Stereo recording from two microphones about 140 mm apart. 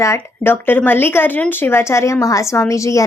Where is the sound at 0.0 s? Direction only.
20° left (ahead or behind).